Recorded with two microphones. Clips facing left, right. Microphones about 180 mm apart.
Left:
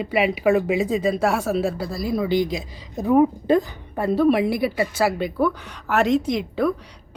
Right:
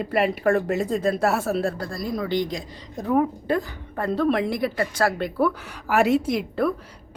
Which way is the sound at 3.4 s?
20° left (ahead or behind).